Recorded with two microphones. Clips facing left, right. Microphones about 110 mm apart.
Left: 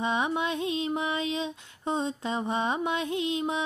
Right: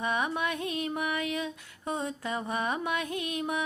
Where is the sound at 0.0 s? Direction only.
20° left (ahead or behind).